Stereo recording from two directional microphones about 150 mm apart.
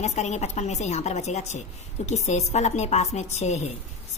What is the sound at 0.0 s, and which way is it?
Speech, 50° left (ahead or behind).